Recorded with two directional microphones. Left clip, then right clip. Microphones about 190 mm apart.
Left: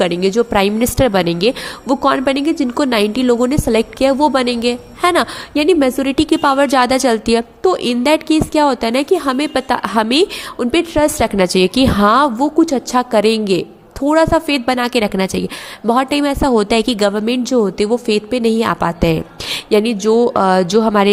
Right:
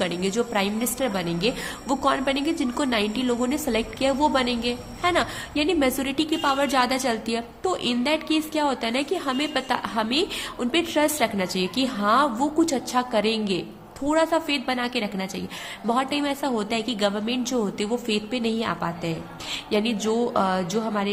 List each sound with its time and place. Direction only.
0.0 s a woman's voice: 40° left (ahead or behind)